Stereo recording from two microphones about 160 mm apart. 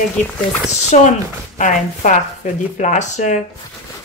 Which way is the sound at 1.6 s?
55° left (ahead or behind).